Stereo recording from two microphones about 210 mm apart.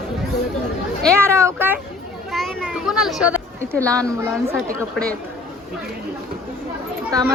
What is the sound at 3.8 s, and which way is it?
Speech, 5° left (ahead or behind).